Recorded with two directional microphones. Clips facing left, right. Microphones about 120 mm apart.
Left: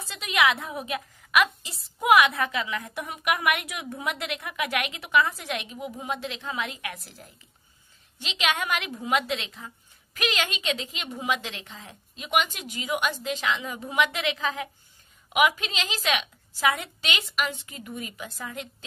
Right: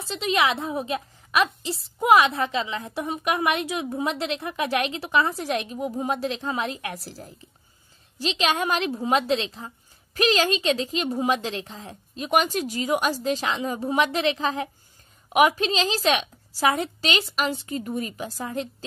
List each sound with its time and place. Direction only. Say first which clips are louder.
0.0 s a woman's voice: right 2 dB; 30° right (ahead or behind)